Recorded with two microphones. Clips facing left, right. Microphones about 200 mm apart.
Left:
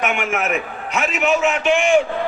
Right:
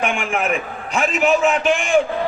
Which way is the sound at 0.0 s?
30° right (ahead or behind).